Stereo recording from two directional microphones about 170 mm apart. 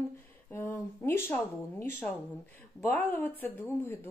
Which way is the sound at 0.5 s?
15° left (ahead or behind).